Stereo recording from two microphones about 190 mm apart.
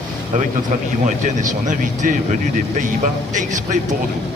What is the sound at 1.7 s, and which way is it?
A man's voice, 40° right (ahead or behind).